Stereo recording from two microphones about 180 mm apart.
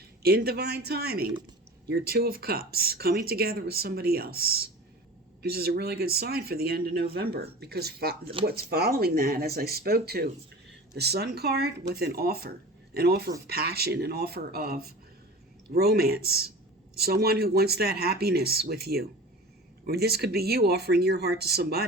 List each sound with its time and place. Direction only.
0.2 s speech: 60° right (ahead or behind)